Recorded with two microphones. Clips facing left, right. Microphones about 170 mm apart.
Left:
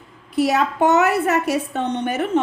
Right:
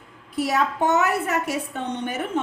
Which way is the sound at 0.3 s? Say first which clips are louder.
Left 4 dB; 75° left (ahead or behind).